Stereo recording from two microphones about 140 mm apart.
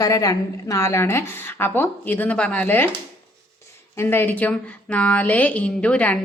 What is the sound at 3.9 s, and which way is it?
A woman's voice, 15° left (ahead or behind).